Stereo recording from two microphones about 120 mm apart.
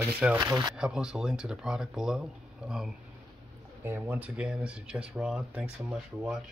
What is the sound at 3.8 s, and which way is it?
Speech, 20° right (ahead or behind).